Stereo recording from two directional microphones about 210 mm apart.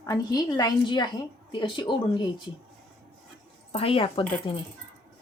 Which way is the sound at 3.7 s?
25° left (ahead or behind).